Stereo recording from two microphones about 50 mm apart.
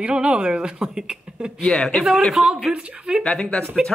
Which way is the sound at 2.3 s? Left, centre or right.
Centre.